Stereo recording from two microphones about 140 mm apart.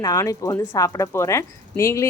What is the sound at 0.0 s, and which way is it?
Speech, 25° left (ahead or behind).